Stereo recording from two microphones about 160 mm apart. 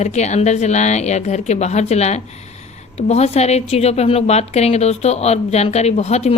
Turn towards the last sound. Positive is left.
turn(degrees=45)  # may be behind; listen again after turning